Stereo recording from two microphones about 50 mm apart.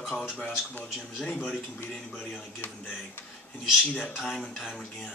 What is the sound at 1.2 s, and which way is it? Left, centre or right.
Speech, left.